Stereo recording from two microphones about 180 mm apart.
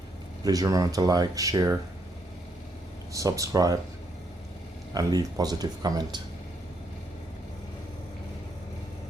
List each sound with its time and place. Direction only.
0.4 s speech: 20° right (ahead or behind)
3.1 s speech: 20° right (ahead or behind)
4.9 s speech: 20° right (ahead or behind)